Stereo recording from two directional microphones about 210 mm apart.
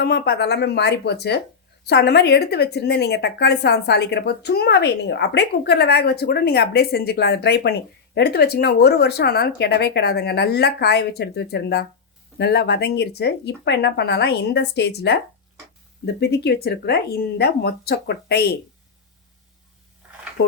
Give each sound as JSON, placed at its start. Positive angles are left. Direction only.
{"t": 0.0, "sound": "a woman's voice", "side_deg": 50}